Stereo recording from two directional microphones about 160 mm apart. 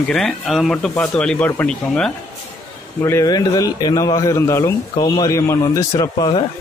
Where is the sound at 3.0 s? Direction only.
20° left (ahead or behind).